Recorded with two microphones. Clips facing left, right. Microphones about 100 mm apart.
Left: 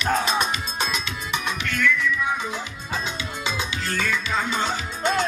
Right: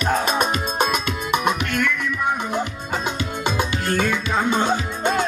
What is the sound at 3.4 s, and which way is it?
Music, 50° right (ahead or behind).